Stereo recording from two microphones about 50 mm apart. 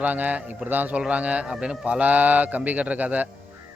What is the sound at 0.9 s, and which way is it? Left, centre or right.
A man's voice, right.